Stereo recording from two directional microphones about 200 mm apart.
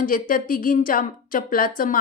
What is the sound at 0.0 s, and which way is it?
A woman's voice, 45° left (ahead or behind).